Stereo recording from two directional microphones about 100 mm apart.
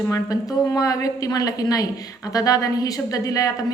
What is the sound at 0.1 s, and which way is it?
A woman's voice, 35° left (ahead or behind).